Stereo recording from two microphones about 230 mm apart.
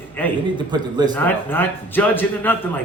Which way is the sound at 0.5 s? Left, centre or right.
Centre.